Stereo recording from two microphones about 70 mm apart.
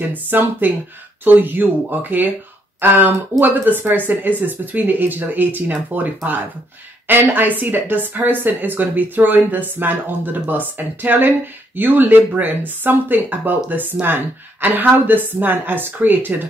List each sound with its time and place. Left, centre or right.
0.1 s speech: right